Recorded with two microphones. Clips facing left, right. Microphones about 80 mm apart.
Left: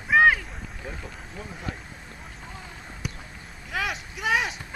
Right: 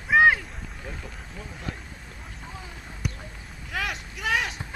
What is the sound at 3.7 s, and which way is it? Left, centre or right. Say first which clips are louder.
Vehicle: left 1 dB; centre.